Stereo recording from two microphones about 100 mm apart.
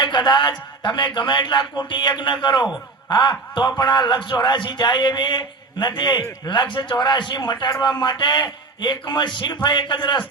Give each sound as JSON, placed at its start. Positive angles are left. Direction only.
{"t": 0.0, "sound": "a man's voice", "side_deg": 50}